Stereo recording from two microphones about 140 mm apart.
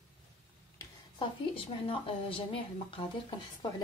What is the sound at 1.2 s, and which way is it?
A woman's voice, 40° left (ahead or behind).